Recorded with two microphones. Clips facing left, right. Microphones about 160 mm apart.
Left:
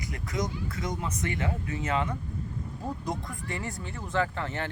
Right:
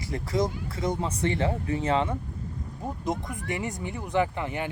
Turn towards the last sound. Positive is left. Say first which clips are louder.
# right 3 dB
turn(degrees=-15)  # may be behind; listen again after turning